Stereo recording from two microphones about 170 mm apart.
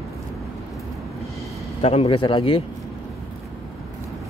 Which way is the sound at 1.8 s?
35° left (ahead or behind).